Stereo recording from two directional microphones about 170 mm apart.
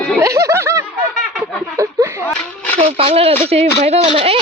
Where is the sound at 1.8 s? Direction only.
15° right (ahead or behind).